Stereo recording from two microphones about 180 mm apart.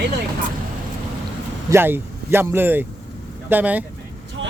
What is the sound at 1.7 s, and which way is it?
Speech, 15° right (ahead or behind).